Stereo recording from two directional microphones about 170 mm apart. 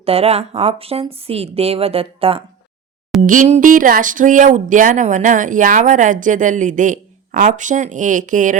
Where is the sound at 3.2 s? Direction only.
50° right (ahead or behind).